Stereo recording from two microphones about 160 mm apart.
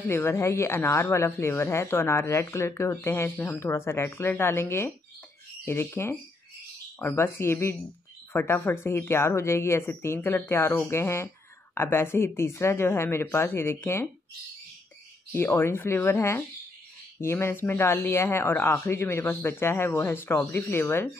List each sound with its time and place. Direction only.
0.1 s speech: 15° left (ahead or behind)
15.3 s speech: 15° left (ahead or behind)